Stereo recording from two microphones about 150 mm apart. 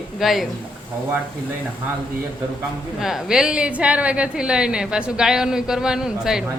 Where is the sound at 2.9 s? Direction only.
Centre (ahead or behind).